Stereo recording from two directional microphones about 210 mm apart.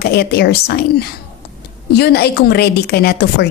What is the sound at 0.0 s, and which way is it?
A woman's voice, 50° left (ahead or behind).